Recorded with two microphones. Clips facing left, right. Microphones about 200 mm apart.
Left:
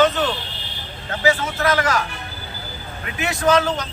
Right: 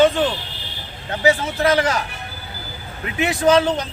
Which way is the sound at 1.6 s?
30° right (ahead or behind).